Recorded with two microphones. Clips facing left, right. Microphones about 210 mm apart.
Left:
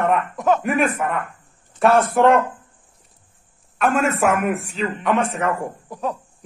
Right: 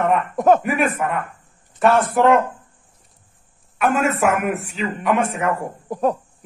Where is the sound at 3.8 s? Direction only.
Centre (ahead or behind).